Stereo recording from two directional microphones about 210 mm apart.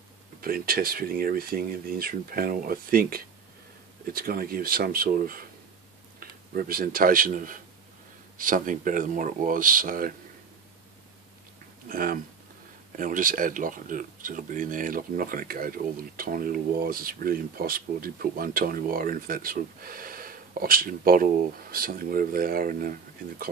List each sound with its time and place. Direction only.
0.4 s speech: 45° right (ahead or behind)
11.9 s speech: 45° right (ahead or behind)